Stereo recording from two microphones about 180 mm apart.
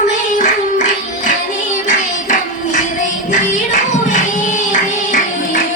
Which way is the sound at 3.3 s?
45° left (ahead or behind).